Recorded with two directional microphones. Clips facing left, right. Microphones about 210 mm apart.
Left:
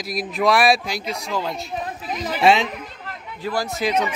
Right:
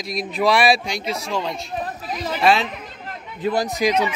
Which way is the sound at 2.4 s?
20° left (ahead or behind).